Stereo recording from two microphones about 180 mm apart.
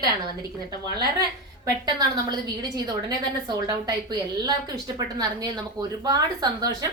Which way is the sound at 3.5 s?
20° right (ahead or behind).